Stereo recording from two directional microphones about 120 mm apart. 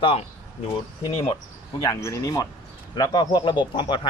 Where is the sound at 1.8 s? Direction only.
25° left (ahead or behind).